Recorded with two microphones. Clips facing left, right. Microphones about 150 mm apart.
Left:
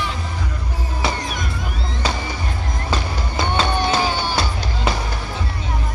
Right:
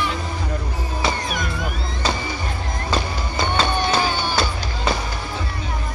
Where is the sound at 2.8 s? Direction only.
5° left (ahead or behind).